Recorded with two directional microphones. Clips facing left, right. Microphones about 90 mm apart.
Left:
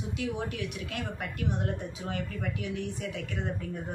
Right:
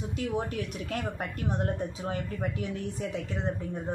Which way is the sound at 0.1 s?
40° right (ahead or behind).